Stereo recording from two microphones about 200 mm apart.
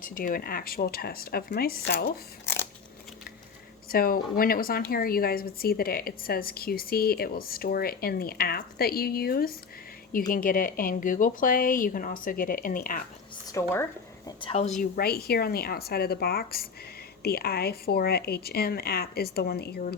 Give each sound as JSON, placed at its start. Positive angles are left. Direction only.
{"t": 0.0, "sound": "a woman's voice", "side_deg": 45}
{"t": 3.8, "sound": "a woman's voice", "side_deg": 45}
{"t": 13.5, "sound": "speech", "side_deg": 15}
{"t": 14.3, "sound": "a woman's voice", "side_deg": 30}
{"t": 14.8, "sound": "a woman's voice", "side_deg": 50}